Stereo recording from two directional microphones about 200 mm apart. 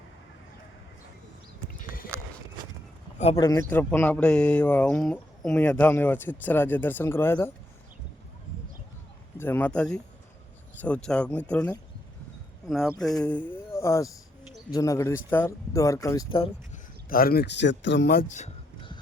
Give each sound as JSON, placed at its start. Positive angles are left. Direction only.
{"t": 3.3, "sound": "speech", "side_deg": 15}
{"t": 9.4, "sound": "speech", "side_deg": 10}
{"t": 17.1, "sound": "speech", "side_deg": 45}